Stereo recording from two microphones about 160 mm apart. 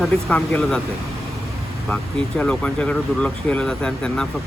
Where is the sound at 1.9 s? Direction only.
5° left (ahead or behind).